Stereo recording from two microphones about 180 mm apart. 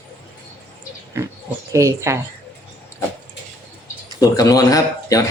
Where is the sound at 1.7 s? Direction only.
15° right (ahead or behind).